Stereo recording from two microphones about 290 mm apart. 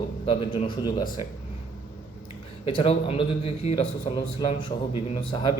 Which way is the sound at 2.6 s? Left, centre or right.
Left.